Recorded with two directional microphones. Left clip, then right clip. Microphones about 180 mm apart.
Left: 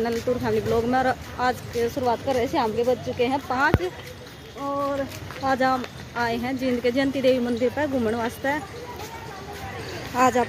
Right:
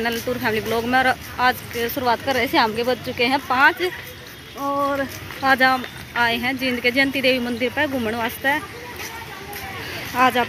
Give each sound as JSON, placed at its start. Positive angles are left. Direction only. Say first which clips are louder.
{"t": 0.0, "sound": "speech", "louder": "right 2 dB", "side_deg": 0}
{"t": 2.0, "sound": "speech", "louder": "right 5 dB", "side_deg": -5}
{"t": 4.6, "sound": "speech", "louder": "right 4 dB", "side_deg": -25}
{"t": 5.4, "sound": "speech", "louder": "right 5 dB", "side_deg": 0}
{"t": 10.1, "sound": "speech", "louder": "right 2 dB", "side_deg": 15}